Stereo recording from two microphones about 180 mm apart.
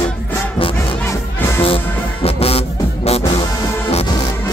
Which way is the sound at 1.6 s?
30° left (ahead or behind).